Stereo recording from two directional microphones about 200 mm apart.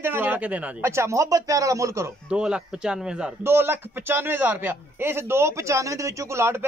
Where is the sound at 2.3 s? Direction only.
5° right (ahead or behind).